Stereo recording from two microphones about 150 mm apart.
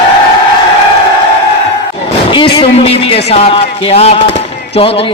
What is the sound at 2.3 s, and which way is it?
A man's voice, 35° left (ahead or behind).